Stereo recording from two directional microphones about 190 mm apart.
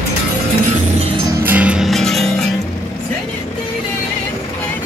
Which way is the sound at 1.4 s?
10° right (ahead or behind).